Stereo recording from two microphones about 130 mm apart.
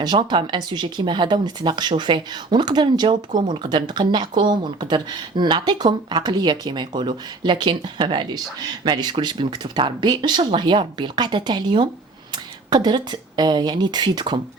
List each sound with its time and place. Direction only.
0.0 s speech: 35° right (ahead or behind)